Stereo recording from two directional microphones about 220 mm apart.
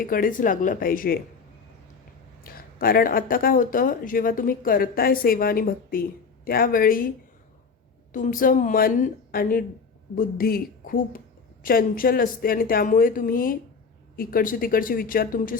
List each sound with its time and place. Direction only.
0.0 s speech: 40° left (ahead or behind)
2.4 s speech: 40° left (ahead or behind)
8.1 s speech: 40° left (ahead or behind)